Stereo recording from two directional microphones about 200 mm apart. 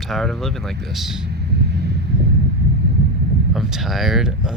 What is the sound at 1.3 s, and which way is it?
Vehicle, 55° right (ahead or behind).